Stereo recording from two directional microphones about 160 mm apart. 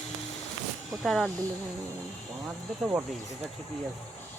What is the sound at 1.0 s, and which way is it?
Speech, centre (ahead or behind).